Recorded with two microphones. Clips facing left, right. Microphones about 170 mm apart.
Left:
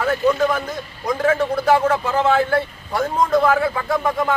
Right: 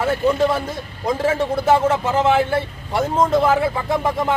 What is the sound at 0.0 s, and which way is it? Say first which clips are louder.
A man's voice: even; 25° right (ahead or behind).